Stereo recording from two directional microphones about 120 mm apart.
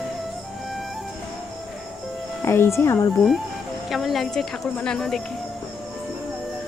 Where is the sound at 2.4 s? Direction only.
20° left (ahead or behind).